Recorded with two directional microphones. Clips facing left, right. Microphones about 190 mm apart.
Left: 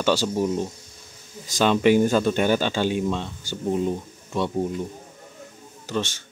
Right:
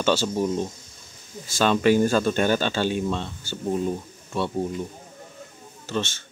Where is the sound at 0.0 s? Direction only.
15° left (ahead or behind).